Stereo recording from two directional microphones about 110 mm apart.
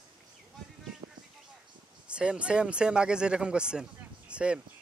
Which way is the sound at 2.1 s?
10° right (ahead or behind).